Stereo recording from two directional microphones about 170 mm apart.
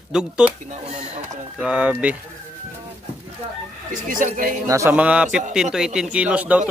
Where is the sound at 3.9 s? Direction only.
50° right (ahead or behind).